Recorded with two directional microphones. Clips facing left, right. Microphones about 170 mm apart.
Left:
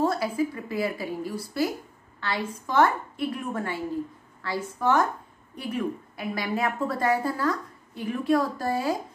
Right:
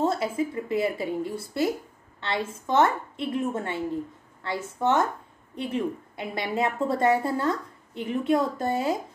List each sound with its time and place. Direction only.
0.0 s a woman's voice: 25° right (ahead or behind)